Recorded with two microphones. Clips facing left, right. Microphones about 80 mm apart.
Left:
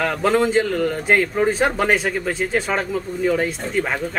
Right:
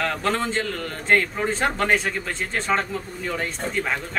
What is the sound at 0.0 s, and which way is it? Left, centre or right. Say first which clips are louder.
A man's voice: left 6 dB; centre.